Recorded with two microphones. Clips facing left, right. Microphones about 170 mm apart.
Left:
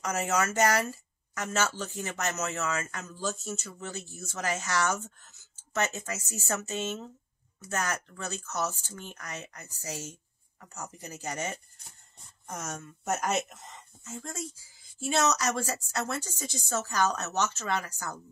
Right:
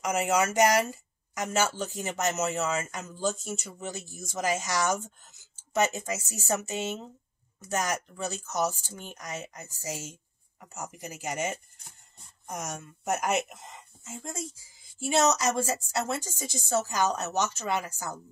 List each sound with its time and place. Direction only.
0.0 s speech: 15° right (ahead or behind)